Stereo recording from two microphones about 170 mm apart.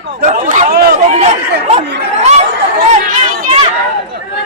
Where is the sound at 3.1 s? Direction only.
50° right (ahead or behind).